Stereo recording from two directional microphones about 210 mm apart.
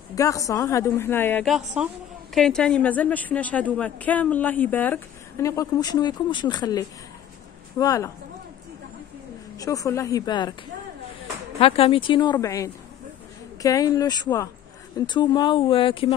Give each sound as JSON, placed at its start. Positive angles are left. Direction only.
{"t": 0.1, "sound": "a woman's voice", "side_deg": 15}
{"t": 1.5, "sound": "a woman's voice", "side_deg": -5}
{"t": 9.6, "sound": "a woman's voice", "side_deg": 15}
{"t": 11.6, "sound": "a woman's voice", "side_deg": 25}